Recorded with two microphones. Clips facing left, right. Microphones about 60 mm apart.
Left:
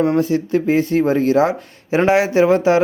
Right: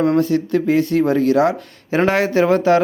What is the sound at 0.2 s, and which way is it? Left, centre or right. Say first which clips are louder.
Speech: even; centre.